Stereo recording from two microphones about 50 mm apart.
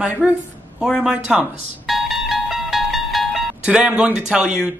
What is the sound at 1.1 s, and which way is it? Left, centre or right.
Speech, centre.